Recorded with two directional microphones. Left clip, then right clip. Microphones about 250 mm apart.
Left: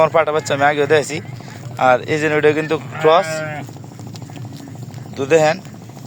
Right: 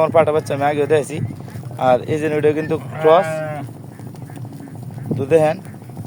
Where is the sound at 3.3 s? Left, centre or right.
Right.